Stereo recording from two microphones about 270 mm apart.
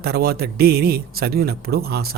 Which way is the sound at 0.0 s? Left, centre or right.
Right.